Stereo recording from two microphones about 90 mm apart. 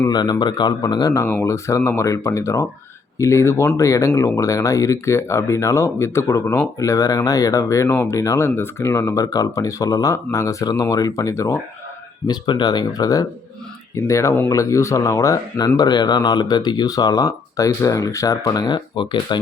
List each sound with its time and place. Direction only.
0.1 s speech: 50° left (ahead or behind)
1.1 s speech: 30° left (ahead or behind)
12.3 s speech: 60° left (ahead or behind)